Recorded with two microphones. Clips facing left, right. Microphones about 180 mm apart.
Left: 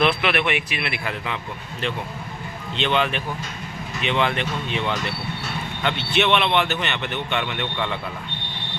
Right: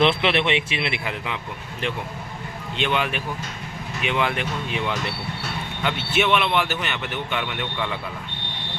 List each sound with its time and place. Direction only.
0.0 s a man's voice: 25° right (ahead or behind)
2.7 s speech: 10° right (ahead or behind)